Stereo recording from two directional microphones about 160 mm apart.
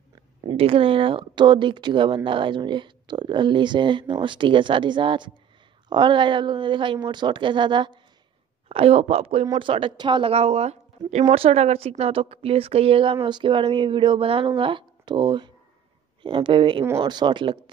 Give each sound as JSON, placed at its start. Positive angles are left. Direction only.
{"t": 0.5, "sound": "a woman's voice", "side_deg": -35}